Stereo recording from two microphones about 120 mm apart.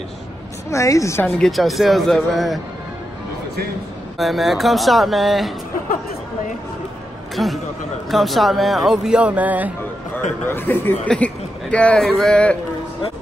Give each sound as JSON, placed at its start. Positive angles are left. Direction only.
{"t": 0.7, "sound": "a woman's voice", "side_deg": 25}
{"t": 1.2, "sound": "speech", "side_deg": 0}
{"t": 4.2, "sound": "speech", "side_deg": 0}
{"t": 7.3, "sound": "speech", "side_deg": 0}
{"t": 10.5, "sound": "speech", "side_deg": 15}